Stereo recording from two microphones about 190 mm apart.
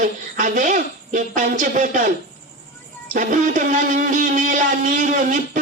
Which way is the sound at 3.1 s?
45° right (ahead or behind).